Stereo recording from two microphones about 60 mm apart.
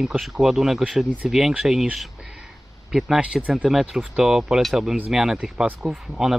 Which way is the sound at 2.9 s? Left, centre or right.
Centre.